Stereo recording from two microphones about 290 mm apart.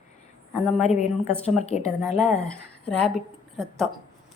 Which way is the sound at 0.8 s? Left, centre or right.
Left.